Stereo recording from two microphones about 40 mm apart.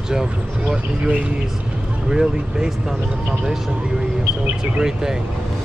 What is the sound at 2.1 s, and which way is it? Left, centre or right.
Speech, centre.